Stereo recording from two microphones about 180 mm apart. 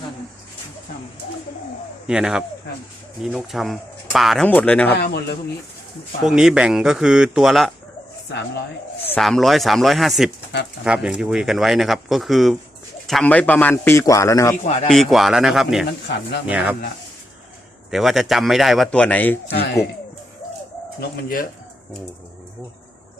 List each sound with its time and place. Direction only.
2.0 s a man's voice: 5° right (ahead or behind)
4.9 s a man's voice: 65° left (ahead or behind)
6.2 s speech: 5° right (ahead or behind)
8.3 s speech: 70° left (ahead or behind)
9.1 s a man's voice: centre (ahead or behind)
14.6 s speech: 40° left (ahead or behind)
14.8 s speech: centre (ahead or behind)
17.9 s speech: centre (ahead or behind)
19.5 s a man's voice: 65° left (ahead or behind)
21.0 s a man's voice: 55° left (ahead or behind)